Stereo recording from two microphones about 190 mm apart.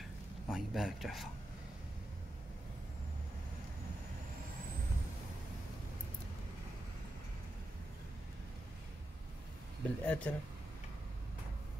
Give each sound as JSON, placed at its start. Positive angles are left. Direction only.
{"t": 0.5, "sound": "speech", "side_deg": 0}
{"t": 10.0, "sound": "speech", "side_deg": 5}